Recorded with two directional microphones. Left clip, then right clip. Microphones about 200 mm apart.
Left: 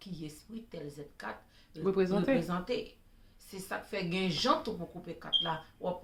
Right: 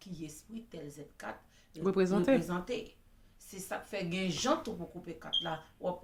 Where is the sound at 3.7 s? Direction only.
5° left (ahead or behind).